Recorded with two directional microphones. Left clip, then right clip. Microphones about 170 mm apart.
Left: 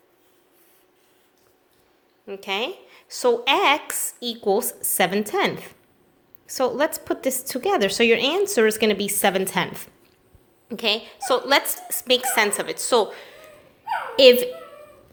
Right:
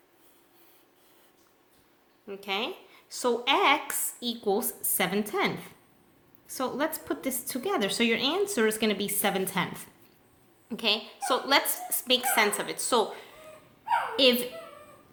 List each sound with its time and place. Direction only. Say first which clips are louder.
2.2 s a woman's voice: left 5 dB; 35° left (ahead or behind)